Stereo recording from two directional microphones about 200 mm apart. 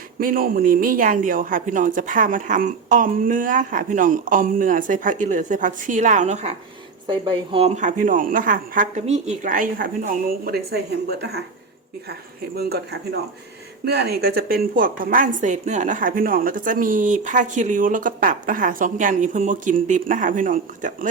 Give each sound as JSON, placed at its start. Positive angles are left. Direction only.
{"t": 0.2, "sound": "a woman's voice", "side_deg": -45}
{"t": 12.5, "sound": "a woman's voice", "side_deg": -50}